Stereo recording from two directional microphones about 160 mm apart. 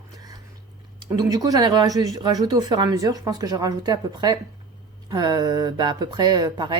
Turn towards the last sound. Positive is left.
turn(degrees=-25)  # may be behind; listen again after turning